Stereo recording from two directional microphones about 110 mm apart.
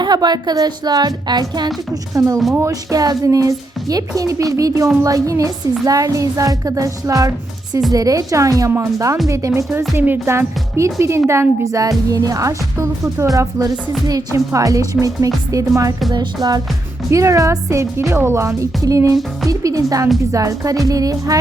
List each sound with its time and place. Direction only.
0.0 s speech: 40° right (ahead or behind)
2.1 s speech: 30° right (ahead or behind)